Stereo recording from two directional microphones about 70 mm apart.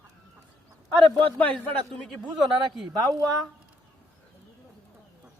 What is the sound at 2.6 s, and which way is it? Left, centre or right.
Speech, right.